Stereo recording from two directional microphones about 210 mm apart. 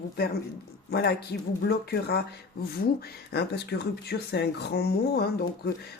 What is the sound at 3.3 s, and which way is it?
Speech, 50° left (ahead or behind).